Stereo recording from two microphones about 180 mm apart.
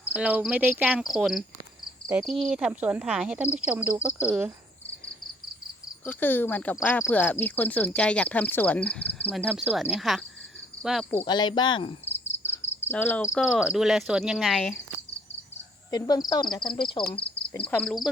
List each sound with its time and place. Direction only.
0.1 s speech: 5° right (ahead or behind)
6.1 s speech: 10° left (ahead or behind)
11.2 s cricket: 25° left (ahead or behind)
12.8 s cricket: 10° left (ahead or behind)
13.3 s speech: 5° right (ahead or behind)
15.9 s speech: 20° left (ahead or behind)
17.1 s cricket: 30° left (ahead or behind)
17.7 s speech: 5° left (ahead or behind)